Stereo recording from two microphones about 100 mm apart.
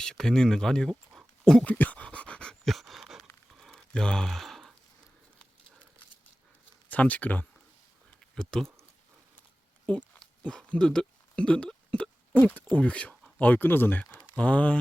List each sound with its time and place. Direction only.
0.0 s a sound: 5° left (ahead or behind)
6.8 s speech: 15° left (ahead or behind)
8.4 s speech: 5° left (ahead or behind)
9.9 s speech: 15° left (ahead or behind)
10.4 s hiccup: 10° left (ahead or behind)
12.4 s speech: 15° left (ahead or behind)